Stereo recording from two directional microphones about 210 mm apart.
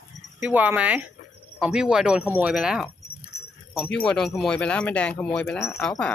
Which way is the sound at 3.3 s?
50° left (ahead or behind).